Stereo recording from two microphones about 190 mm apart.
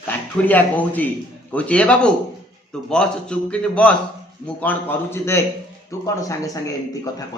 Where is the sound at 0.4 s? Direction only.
10° left (ahead or behind).